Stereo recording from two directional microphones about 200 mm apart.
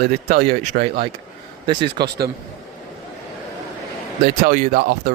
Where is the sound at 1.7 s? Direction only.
55° right (ahead or behind).